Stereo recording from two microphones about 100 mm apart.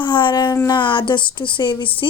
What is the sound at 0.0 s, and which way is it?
A woman's voice, 50° left (ahead or behind).